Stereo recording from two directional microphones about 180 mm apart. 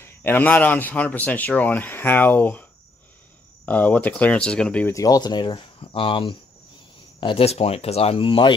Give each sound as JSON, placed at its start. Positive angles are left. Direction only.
{"t": 0.0, "sound": "speech", "side_deg": 10}
{"t": 3.6, "sound": "speech", "side_deg": 10}
{"t": 4.9, "sound": "speech", "side_deg": 20}